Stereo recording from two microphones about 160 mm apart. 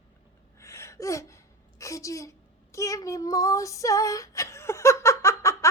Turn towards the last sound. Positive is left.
turn(degrees=20)  # may be behind; listen again after turning